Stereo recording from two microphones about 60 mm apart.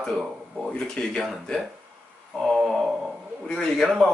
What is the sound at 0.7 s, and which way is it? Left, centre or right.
Speech, centre.